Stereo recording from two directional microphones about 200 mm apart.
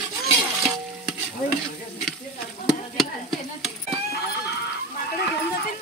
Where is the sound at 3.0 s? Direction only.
Centre (ahead or behind).